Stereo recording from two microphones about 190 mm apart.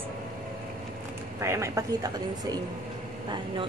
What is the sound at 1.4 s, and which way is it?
A woman's voice, 15° right (ahead or behind).